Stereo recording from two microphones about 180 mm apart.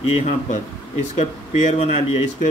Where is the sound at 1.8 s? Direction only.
35° left (ahead or behind).